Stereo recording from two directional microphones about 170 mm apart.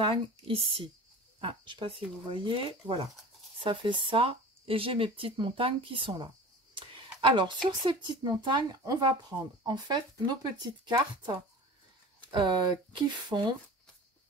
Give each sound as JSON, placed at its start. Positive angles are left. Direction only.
{"t": 0.0, "sound": "speech", "side_deg": -30}